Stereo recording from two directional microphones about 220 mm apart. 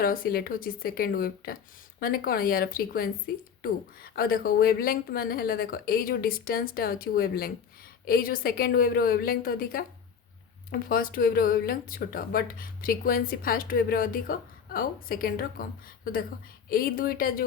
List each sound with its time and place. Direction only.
0.0 s speech: 40° left (ahead or behind)
16.6 s speech: 40° left (ahead or behind)